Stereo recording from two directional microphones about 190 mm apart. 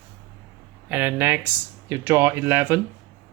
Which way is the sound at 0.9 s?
10° right (ahead or behind).